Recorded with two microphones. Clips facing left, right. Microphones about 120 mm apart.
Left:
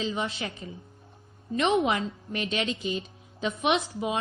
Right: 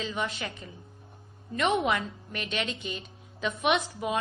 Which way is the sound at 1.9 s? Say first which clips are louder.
Left 1 dB; 30° left (ahead or behind).